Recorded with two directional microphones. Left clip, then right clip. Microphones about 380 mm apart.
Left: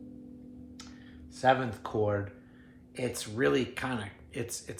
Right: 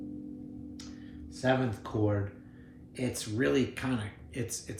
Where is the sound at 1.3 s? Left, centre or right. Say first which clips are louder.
Left 3 dB; centre.